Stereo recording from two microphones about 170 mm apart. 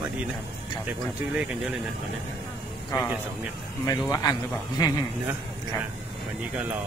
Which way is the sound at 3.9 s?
20° left (ahead or behind).